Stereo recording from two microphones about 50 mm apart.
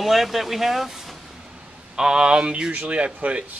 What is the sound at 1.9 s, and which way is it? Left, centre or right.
Speech, centre.